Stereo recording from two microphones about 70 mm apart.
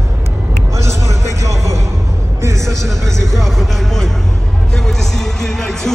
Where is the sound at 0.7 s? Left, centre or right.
Right.